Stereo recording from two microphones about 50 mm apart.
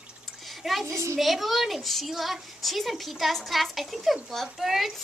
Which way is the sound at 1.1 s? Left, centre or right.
Centre.